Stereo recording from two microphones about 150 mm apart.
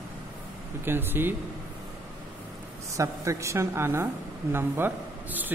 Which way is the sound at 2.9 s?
20° right (ahead or behind).